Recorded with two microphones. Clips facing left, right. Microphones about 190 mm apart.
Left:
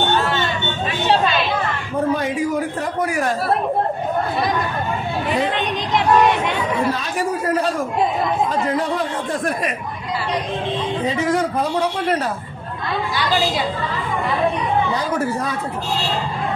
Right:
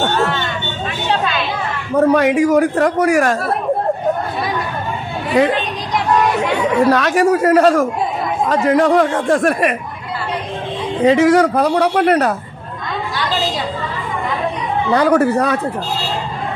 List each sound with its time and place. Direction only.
2.0 s a man's voice: 75° right (ahead or behind)
6.9 s a man's voice: 85° right
11.1 s a man's voice: 80° right
15.0 s a man's voice: 70° right (ahead or behind)